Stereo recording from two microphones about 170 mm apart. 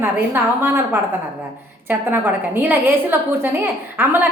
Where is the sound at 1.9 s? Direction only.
10° right (ahead or behind).